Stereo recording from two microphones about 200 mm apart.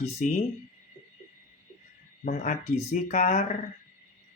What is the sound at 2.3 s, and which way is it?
Speech, 35° left (ahead or behind).